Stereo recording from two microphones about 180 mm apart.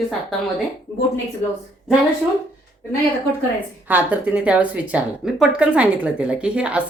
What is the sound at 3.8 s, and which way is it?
Speech, 10° right (ahead or behind).